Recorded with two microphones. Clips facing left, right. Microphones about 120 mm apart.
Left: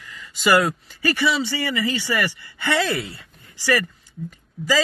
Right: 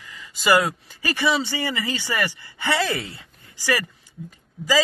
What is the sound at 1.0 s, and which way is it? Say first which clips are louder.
Speech: left 1 dB; 20° right (ahead or behind).